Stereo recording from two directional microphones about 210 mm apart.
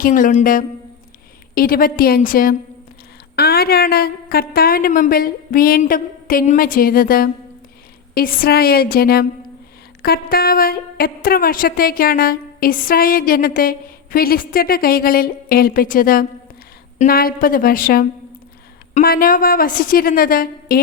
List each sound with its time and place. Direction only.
0.0 s a woman's voice: 40° left (ahead or behind)